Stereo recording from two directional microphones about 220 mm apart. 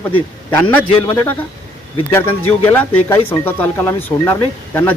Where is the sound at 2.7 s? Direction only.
10° left (ahead or behind).